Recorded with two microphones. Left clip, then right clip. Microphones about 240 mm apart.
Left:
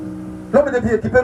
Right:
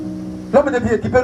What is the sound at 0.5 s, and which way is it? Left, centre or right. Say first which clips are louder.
Speech: even; centre.